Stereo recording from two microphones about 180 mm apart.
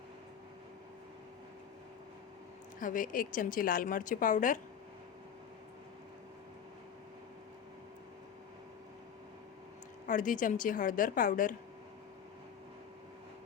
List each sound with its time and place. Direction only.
2.8 s a woman's voice: 50° left (ahead or behind)
10.1 s a woman's voice: 45° left (ahead or behind)